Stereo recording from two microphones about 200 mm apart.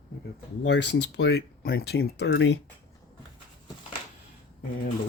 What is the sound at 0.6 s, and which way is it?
Speech, 60° left (ahead or behind).